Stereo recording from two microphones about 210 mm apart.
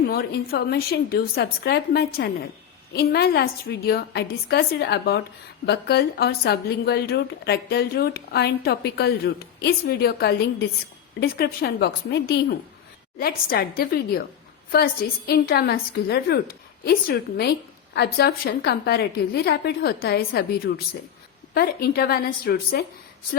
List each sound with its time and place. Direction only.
0.1 s a woman's voice: 50° left (ahead or behind)
15.3 s a woman's voice: 50° left (ahead or behind)